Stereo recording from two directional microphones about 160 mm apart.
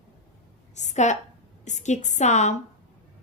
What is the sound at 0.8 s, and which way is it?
Speech, 45° left (ahead or behind).